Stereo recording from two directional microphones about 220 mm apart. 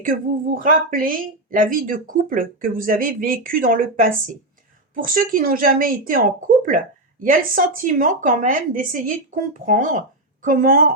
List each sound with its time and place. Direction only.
0.0 s speech: 40° right (ahead or behind)